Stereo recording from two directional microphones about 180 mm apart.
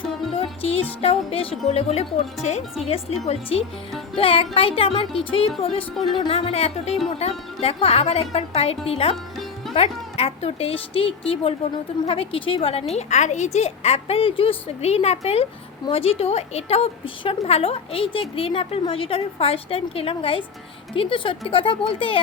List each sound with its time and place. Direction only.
0.3 s speech: 30° left (ahead or behind)
4.2 s a woman's voice: 30° left (ahead or behind)
10.2 s a woman's voice: 35° left (ahead or behind)